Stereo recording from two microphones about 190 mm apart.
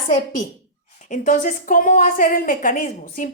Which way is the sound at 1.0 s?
40° left (ahead or behind).